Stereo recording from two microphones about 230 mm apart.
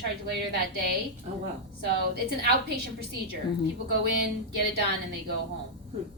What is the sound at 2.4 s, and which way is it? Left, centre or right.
Speech, right.